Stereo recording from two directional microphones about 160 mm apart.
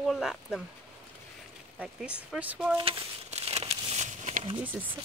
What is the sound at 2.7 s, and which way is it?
Crumpling, 35° right (ahead or behind).